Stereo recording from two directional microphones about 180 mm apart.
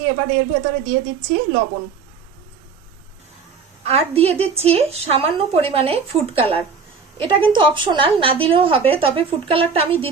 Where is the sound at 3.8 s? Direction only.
35° right (ahead or behind).